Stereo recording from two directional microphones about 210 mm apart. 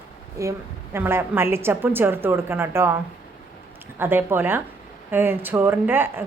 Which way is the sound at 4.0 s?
10° right (ahead or behind).